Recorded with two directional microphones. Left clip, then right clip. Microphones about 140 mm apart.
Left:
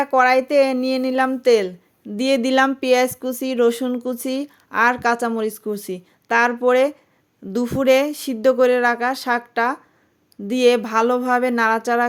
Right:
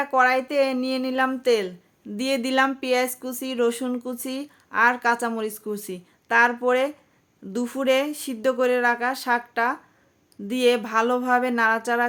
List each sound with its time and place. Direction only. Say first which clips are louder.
0.0 s speech: left 4 dB; 35° left (ahead or behind)